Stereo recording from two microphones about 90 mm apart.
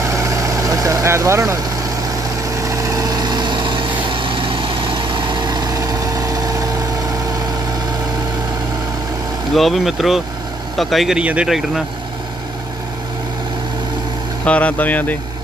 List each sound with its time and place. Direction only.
0.1 s vehicle: 35° right (ahead or behind)
2.6 s vehicle: 35° right (ahead or behind)
9.6 s speech: centre (ahead or behind)
14.4 s speech: 15° left (ahead or behind)